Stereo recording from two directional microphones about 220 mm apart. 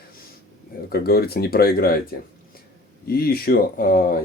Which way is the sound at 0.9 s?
45° left (ahead or behind).